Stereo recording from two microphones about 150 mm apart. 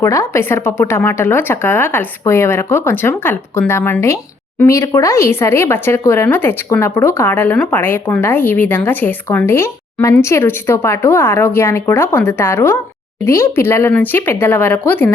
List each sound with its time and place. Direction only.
0.0 s speech: 20° left (ahead or behind)